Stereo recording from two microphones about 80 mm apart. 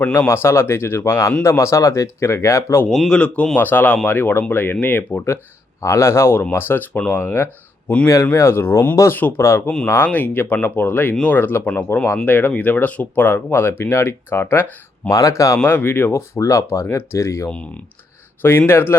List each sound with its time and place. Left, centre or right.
0.3 s speech: left
2.9 s speech: centre; by 5.2 s left
5.8 s speech: left
9.0 s speech: left
11.1 s speech: centre
11.3 s speech: left
15.1 s speech: left
15.6 s speech: left